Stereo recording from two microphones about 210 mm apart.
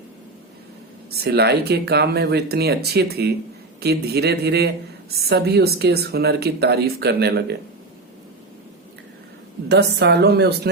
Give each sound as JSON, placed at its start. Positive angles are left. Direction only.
{"t": 1.1, "sound": "speech", "side_deg": -50}
{"t": 9.6, "sound": "speech", "side_deg": -55}